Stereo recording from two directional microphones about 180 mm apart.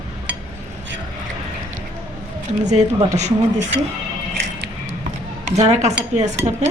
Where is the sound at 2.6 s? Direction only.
40° right (ahead or behind).